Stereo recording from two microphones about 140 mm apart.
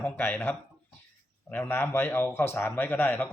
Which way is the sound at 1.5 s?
15° left (ahead or behind).